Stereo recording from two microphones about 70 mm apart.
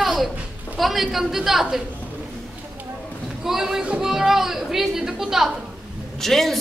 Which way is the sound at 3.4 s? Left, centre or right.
Centre.